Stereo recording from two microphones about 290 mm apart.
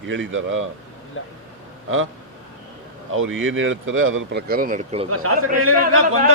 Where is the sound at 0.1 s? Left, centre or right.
Right.